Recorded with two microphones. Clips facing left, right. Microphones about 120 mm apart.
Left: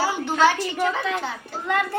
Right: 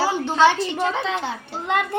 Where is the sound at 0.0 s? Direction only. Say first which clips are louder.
Right 2 dB; 25° right (ahead or behind).